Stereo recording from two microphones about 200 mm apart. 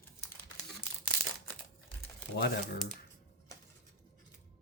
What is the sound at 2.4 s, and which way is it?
Speech, 55° left (ahead or behind).